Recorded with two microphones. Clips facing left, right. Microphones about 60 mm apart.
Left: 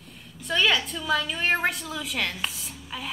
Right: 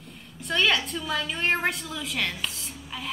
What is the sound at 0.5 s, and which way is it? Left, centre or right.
A woman's voice, centre.